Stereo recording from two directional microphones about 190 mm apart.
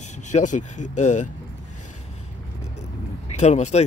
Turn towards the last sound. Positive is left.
turn(degrees=35)  # may be behind; listen again after turning